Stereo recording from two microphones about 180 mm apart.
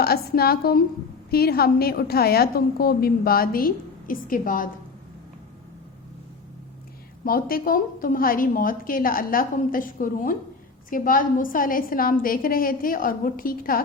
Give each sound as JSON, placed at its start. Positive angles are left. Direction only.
{"t": 0.0, "sound": "a woman's voice", "side_deg": 60}
{"t": 7.3, "sound": "a woman's voice", "side_deg": 55}